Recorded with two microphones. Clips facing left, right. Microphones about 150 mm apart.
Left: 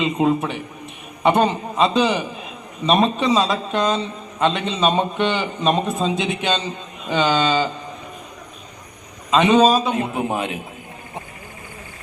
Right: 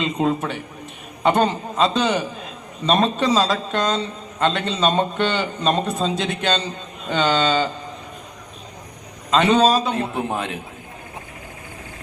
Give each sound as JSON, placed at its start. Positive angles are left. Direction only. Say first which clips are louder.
{"t": 0.0, "sound": "a man's voice", "louder": "left 2 dB", "side_deg": 5}
{"t": 9.3, "sound": "a man's voice", "louder": "left 2 dB", "side_deg": 5}